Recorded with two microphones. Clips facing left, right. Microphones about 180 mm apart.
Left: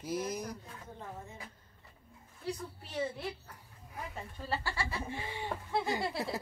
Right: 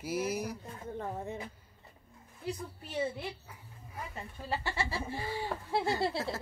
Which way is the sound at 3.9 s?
Centre (ahead or behind).